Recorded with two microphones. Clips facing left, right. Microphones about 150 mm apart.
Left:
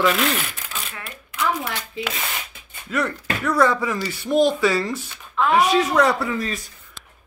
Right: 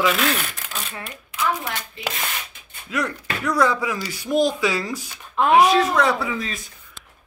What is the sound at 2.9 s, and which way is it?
Speech, 5° right (ahead or behind).